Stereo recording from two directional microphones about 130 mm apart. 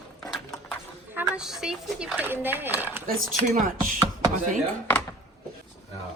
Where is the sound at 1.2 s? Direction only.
5° right (ahead or behind).